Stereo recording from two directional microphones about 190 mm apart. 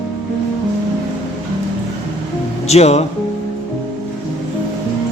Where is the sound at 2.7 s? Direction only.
35° left (ahead or behind).